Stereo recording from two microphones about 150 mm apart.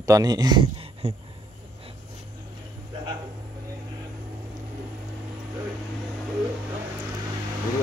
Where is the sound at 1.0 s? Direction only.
45° right (ahead or behind).